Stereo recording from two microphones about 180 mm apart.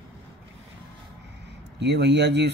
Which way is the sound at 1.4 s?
70° right (ahead or behind).